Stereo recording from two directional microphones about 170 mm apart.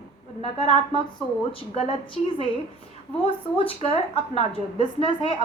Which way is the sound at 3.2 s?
35° left (ahead or behind).